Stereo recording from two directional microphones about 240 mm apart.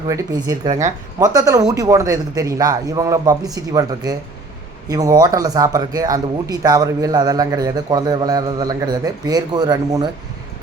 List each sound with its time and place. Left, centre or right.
0.1 s speech: centre
0.7 s speech: right
1.2 s speech: centre